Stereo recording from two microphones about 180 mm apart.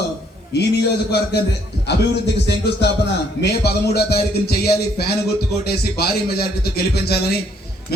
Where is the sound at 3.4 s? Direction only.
65° left (ahead or behind).